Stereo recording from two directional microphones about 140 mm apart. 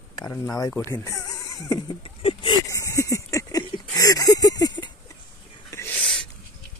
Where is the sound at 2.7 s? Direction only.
20° left (ahead or behind).